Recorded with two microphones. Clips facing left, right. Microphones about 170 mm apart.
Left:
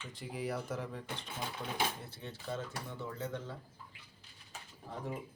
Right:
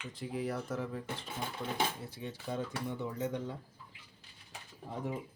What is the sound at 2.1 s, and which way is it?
Speech, 10° right (ahead or behind).